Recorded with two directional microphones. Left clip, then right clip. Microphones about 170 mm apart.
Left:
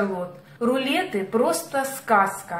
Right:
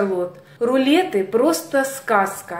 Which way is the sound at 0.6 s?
45° right (ahead or behind).